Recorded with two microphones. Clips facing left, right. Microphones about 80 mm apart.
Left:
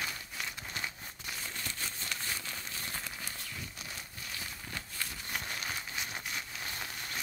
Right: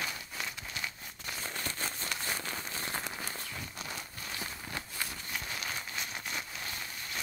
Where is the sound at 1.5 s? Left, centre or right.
Right.